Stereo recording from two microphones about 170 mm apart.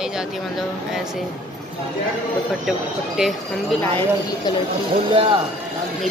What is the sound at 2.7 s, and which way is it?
Speech, centre (ahead or behind).